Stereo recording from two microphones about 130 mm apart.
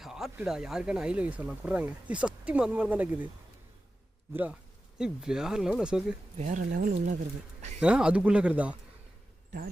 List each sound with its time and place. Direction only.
0.0 s speech: 5° right (ahead or behind)
4.9 s speech: 5° right (ahead or behind)
6.3 s speech: 65° right (ahead or behind); by 7.2 s 90° right
7.8 s speech: 10° right (ahead or behind)